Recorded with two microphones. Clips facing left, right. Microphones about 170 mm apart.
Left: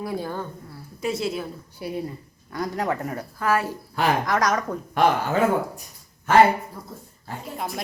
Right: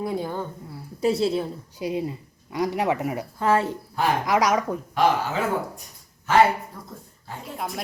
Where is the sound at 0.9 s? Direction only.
35° right (ahead or behind).